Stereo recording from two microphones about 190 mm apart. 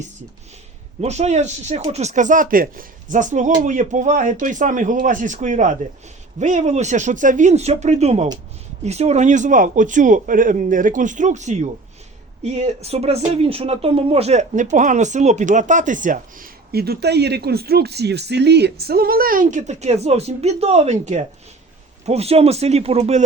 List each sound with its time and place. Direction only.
1.0 s speech: 35° right (ahead or behind)